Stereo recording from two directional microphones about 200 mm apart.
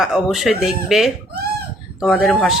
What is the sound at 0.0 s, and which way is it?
Speech, centre (ahead or behind).